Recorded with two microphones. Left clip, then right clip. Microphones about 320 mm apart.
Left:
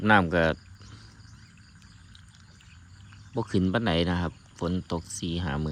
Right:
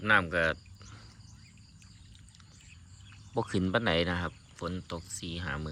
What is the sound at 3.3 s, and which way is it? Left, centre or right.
Speech, centre.